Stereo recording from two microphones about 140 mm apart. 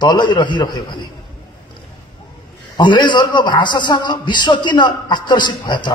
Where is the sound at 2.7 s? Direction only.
35° left (ahead or behind).